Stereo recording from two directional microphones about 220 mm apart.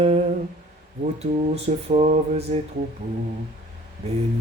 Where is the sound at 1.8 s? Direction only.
30° right (ahead or behind).